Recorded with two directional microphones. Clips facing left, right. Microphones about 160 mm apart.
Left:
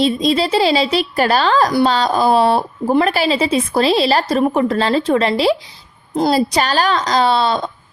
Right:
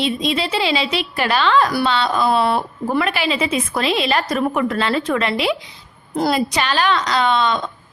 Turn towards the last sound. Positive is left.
turn(degrees=35)  # may be behind; listen again after turning